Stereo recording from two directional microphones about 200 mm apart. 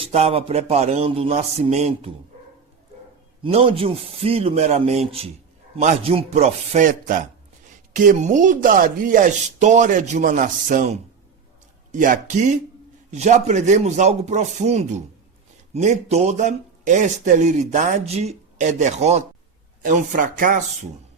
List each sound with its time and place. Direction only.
0.1 s speech: 30° right (ahead or behind)
3.4 s a man's voice: 25° right (ahead or behind); by 20.7 s 40° right (ahead or behind)